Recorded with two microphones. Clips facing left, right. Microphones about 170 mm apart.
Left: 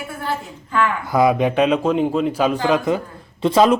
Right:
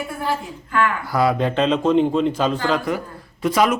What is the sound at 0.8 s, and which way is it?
A man's voice, 20° left (ahead or behind).